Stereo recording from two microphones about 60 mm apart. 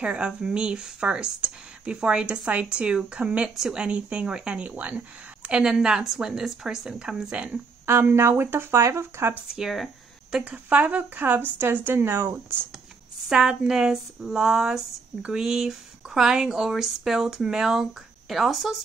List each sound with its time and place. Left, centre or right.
0.0 s speech: centre
7.8 s speech: right
9.6 s speech: centre
10.4 s speech: right
13.3 s speech: centre